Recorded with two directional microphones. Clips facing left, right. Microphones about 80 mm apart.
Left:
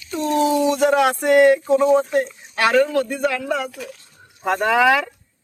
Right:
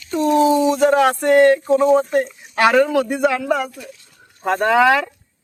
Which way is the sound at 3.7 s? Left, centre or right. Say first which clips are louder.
Left 3 dB; left.